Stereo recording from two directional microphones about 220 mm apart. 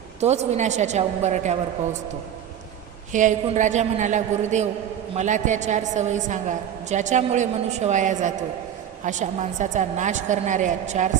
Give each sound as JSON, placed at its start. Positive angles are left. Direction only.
{"t": 0.2, "sound": "a woman's voice", "side_deg": -30}
{"t": 3.1, "sound": "a woman's voice", "side_deg": -35}